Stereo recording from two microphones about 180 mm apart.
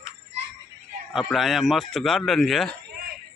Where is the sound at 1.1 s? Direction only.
Centre (ahead or behind).